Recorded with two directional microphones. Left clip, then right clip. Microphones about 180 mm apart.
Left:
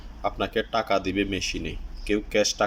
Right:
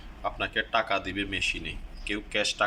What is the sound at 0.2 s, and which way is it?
Speech, 15° left (ahead or behind).